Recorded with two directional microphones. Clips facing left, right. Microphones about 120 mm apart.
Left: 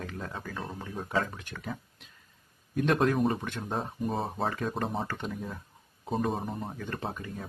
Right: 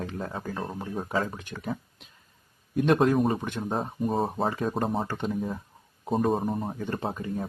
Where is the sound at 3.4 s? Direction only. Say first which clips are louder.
Right 4 dB; 20° right (ahead or behind).